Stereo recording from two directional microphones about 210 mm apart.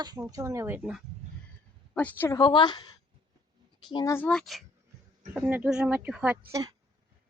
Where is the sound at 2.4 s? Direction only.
20° left (ahead or behind).